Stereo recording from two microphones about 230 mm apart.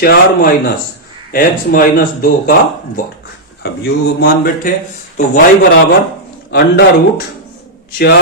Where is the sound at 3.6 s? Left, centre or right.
Left.